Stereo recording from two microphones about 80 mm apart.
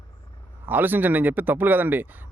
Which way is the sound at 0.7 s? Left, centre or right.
Right.